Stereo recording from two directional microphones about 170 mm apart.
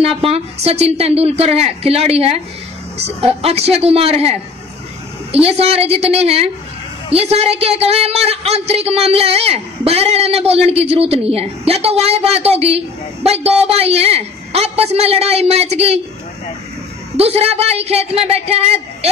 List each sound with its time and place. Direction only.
0.3 s a woman's voice: 40° right (ahead or behind)
17.2 s a woman's voice: 35° right (ahead or behind)